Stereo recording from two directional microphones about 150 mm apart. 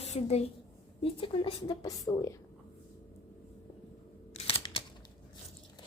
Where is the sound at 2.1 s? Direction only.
25° left (ahead or behind).